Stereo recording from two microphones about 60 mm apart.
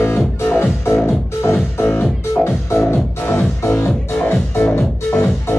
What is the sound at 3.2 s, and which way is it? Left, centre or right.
Music, left.